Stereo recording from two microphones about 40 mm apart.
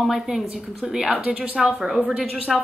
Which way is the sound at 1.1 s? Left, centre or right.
Right.